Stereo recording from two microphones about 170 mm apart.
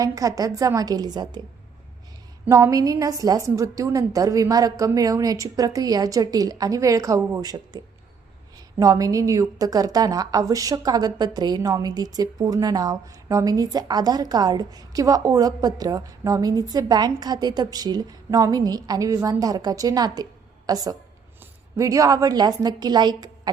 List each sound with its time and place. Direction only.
0.0 s a woman's voice: 20° right (ahead or behind)
2.5 s a woman's voice: 20° right (ahead or behind)
8.8 s a woman's voice: 20° right (ahead or behind)